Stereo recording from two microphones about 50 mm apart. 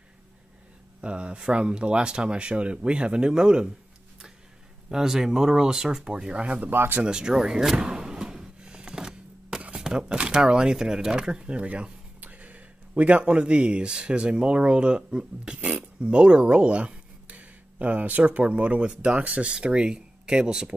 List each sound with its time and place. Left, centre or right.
1.0 s speech: right
4.8 s speech: centre; by 6.6 s right
6.6 s speech: right
7.1 s drawer open or close: centre
9.8 s a sound: centre
13.2 s speech: right